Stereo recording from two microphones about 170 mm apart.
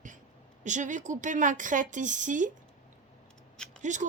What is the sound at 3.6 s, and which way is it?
Speech, 5° left (ahead or behind).